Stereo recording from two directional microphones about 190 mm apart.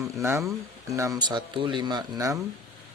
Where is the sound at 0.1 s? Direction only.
15° right (ahead or behind).